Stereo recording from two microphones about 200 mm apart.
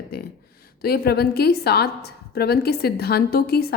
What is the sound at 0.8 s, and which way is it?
A woman's voice, 50° left (ahead or behind).